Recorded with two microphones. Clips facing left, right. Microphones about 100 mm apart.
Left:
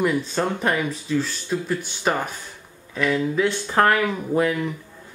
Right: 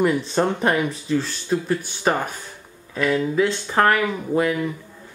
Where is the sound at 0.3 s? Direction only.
20° right (ahead or behind).